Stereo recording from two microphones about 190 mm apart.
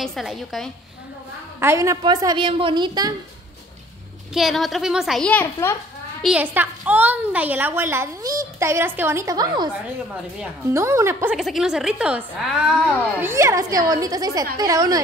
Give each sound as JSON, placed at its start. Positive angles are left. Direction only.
{"t": 0.0, "sound": "a child's voice", "side_deg": 0}
{"t": 1.6, "sound": "a woman's voice", "side_deg": -15}
{"t": 4.3, "sound": "a child's voice", "side_deg": 0}
{"t": 6.2, "sound": "a woman's voice", "side_deg": -5}
{"t": 10.7, "sound": "a woman's voice", "side_deg": -15}
{"t": 11.3, "sound": "a child's voice", "side_deg": 0}